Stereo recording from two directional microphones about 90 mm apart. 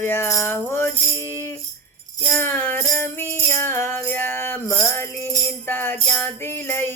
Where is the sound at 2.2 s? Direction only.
20° left (ahead or behind).